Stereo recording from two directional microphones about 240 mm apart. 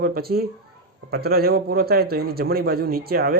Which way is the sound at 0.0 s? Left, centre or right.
Right.